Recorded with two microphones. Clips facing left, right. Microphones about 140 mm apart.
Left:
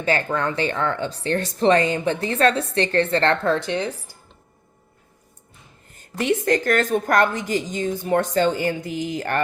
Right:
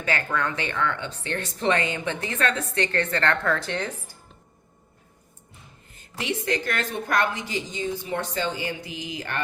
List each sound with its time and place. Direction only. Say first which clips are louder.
0.0 s speech: left 5 dB; 30° left (ahead or behind); by 4.1 s 15° left (ahead or behind)
6.1 s a woman's voice: left 7 dB; 50° left (ahead or behind)